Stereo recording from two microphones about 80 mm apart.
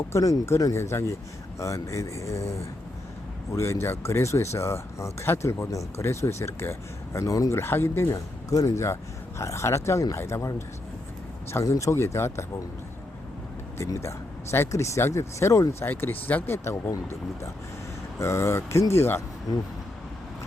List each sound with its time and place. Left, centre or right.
0.1 s speech: left
7.6 s speech: left
11.5 s speech: left
13.7 s speech: left
15.9 s speech: left